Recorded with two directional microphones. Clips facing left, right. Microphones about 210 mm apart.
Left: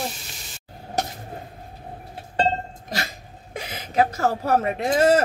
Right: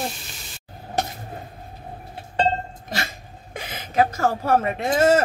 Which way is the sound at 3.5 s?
35° left (ahead or behind).